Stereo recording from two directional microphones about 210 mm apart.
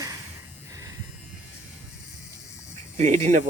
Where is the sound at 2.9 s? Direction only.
35° right (ahead or behind).